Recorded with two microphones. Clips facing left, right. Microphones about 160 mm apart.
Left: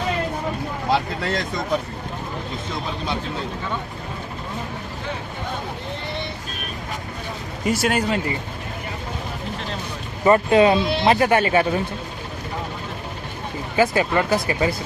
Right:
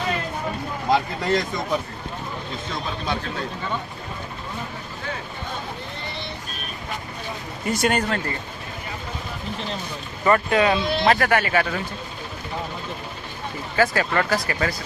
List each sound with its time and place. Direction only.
0.9 s speech: centre (ahead or behind)
7.7 s speech: 5° left (ahead or behind)
10.2 s speech: 25° left (ahead or behind)
13.7 s speech: 20° left (ahead or behind)